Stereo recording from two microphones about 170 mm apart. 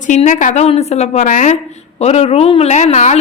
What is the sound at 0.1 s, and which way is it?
A woman's voice, 45° left (ahead or behind).